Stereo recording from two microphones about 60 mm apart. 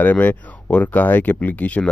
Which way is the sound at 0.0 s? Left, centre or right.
Left.